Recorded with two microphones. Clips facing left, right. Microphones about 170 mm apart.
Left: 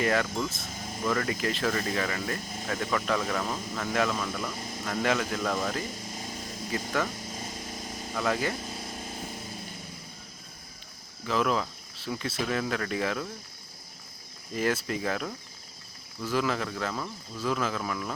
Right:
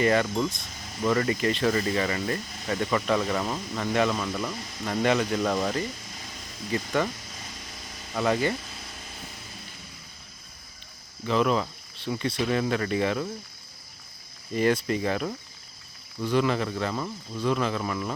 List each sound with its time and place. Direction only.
0.0 s speech: centre (ahead or behind)
6.1 s a sound: 45° left (ahead or behind)
7.3 s vehicle: 45° left (ahead or behind)
8.1 s speech: centre (ahead or behind)
8.6 s a sound: 45° left (ahead or behind)
11.3 s speech: centre (ahead or behind)
14.5 s speech: 5° left (ahead or behind)